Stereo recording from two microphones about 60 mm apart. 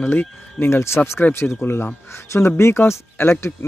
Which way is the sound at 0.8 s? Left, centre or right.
Left.